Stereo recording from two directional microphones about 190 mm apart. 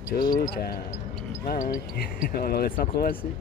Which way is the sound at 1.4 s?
50° left (ahead or behind).